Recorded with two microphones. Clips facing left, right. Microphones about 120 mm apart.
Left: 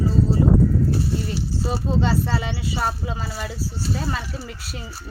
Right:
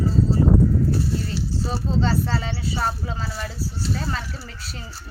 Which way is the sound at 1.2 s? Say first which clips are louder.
Left 1 dB; 15° left (ahead or behind).